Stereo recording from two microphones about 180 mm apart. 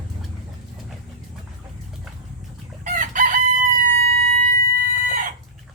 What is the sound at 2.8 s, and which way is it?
Chicken, 45° right (ahead or behind).